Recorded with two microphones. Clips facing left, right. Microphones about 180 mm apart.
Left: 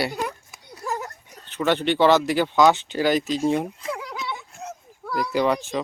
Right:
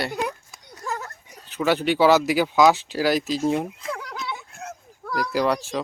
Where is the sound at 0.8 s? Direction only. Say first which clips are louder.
Left 2 dB; 15° left (ahead or behind).